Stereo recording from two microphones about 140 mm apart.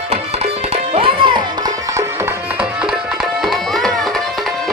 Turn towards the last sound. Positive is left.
turn(degrees=0)  # may be behind; listen again after turning